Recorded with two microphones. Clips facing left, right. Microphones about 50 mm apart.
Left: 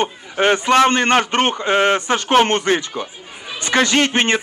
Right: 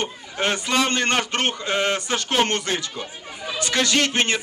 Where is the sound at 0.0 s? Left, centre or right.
Left.